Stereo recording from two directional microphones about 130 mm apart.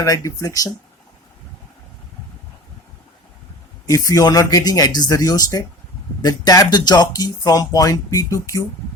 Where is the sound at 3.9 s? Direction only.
25° left (ahead or behind).